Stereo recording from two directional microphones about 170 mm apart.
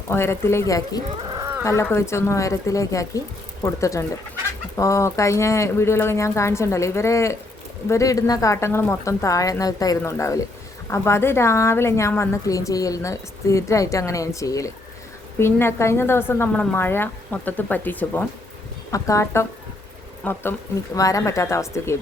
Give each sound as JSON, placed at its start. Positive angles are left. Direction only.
{"t": 0.1, "sound": "speech", "side_deg": 15}
{"t": 1.2, "sound": "a sound", "side_deg": -25}
{"t": 1.6, "sound": "a woman's voice", "side_deg": 15}